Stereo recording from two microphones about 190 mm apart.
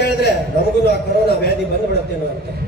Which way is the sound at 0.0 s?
60° left (ahead or behind).